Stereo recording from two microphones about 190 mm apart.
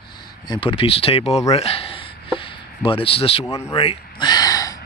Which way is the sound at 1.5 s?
30° left (ahead or behind).